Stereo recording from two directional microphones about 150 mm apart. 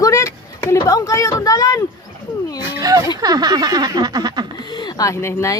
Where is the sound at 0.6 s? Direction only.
20° left (ahead or behind).